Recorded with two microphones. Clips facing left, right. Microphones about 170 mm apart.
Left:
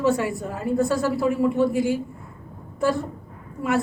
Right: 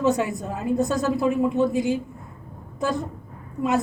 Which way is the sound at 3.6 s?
20° right (ahead or behind).